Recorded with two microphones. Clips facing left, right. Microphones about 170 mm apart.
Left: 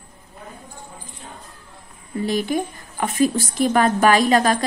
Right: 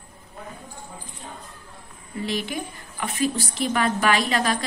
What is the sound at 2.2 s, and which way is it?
A woman's voice, 45° left (ahead or behind).